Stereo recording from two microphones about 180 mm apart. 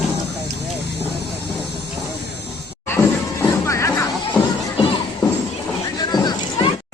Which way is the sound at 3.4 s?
15° left (ahead or behind).